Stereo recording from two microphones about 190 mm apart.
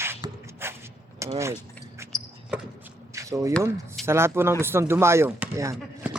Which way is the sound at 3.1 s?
15° right (ahead or behind).